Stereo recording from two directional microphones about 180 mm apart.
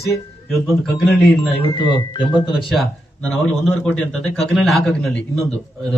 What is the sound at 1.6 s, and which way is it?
Speech, 25° left (ahead or behind).